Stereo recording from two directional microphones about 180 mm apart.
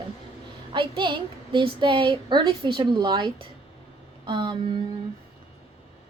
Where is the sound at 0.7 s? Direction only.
25° right (ahead or behind).